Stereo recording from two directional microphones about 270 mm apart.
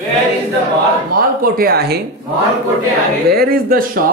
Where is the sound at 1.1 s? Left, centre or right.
Right.